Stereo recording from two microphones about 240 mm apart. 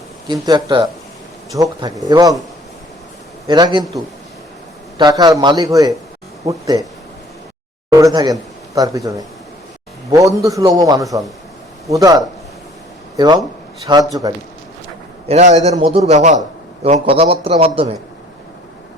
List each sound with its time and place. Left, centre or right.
0.4 s a man's voice: centre
3.4 s a man's voice: centre
4.9 s a man's voice: centre
7.9 s a man's voice: centre
15.3 s a man's voice: right